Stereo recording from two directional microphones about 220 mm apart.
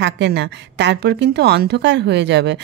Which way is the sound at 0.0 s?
50° right (ahead or behind).